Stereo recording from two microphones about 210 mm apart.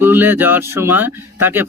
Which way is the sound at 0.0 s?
10° right (ahead or behind).